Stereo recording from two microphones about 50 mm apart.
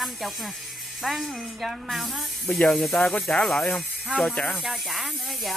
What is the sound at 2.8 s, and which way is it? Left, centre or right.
Speech, centre.